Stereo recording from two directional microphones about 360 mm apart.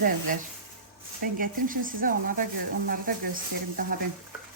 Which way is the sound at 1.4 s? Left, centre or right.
Right.